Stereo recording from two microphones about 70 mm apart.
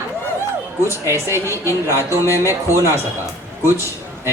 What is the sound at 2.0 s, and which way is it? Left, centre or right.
Speech, right.